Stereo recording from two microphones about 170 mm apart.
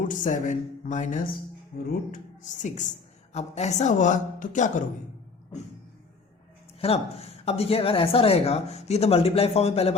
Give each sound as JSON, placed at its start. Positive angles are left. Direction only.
{"t": 0.1, "sound": "a man's voice", "side_deg": 50}
{"t": 6.7, "sound": "a woman's voice", "side_deg": 35}